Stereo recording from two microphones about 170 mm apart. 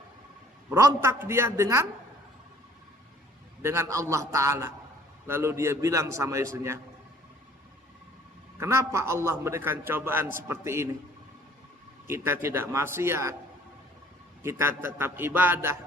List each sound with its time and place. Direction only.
0.7 s a man's voice: 15° right (ahead or behind)
3.6 s a man's voice: 15° right (ahead or behind)
8.5 s a man's voice: 15° right (ahead or behind)
12.0 s a man's voice: 15° right (ahead or behind)
14.4 s a man's voice: 15° right (ahead or behind)